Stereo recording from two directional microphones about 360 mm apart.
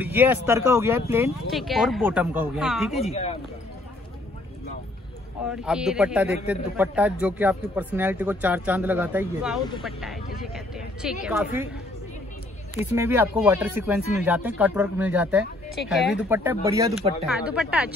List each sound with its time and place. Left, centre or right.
0.0 s speech: centre
3.1 s speech: centre
5.5 s speech: centre
9.6 s speech: centre
9.8 s speech: centre
12.7 s speech: centre